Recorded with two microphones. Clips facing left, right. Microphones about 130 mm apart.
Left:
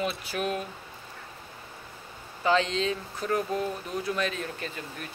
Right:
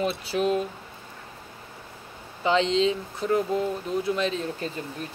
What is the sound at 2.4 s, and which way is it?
Speech, 20° right (ahead or behind).